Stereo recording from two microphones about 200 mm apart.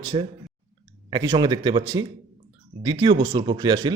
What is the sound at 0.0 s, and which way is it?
A man's voice, 25° right (ahead or behind).